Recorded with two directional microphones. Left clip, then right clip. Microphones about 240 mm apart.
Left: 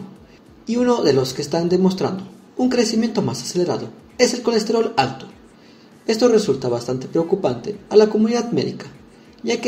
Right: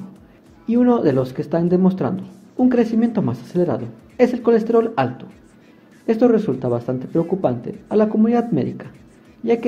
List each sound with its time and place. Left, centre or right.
0.7 s speech: right
6.0 s speech: right